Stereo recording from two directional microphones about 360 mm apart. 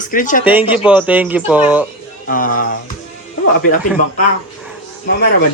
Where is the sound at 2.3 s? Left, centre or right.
Left.